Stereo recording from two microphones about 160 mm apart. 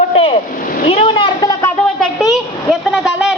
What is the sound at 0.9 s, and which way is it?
Vehicle, 35° left (ahead or behind).